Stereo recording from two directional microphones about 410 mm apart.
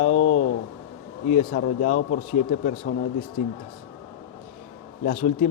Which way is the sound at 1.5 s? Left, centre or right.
Centre.